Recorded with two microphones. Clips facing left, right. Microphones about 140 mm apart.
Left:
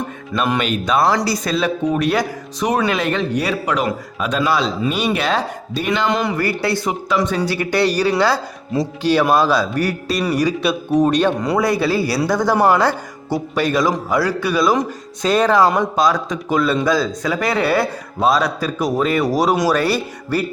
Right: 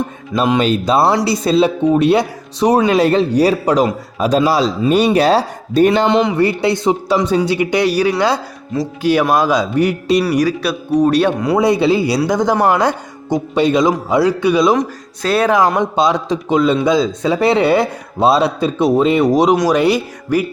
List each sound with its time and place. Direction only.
0.6 s a man's voice: 30° right (ahead or behind)
6.1 s a man's voice: 25° right (ahead or behind)
10.3 s speech: 5° right (ahead or behind)
11.5 s a man's voice: 20° right (ahead or behind)
14.8 s speech: 5° right (ahead or behind)
15.8 s a man's voice: 25° right (ahead or behind)